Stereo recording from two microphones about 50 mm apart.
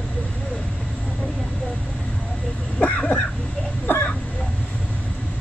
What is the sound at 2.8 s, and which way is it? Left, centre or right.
Cough, left.